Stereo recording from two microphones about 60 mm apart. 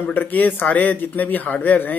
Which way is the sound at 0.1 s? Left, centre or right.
Left.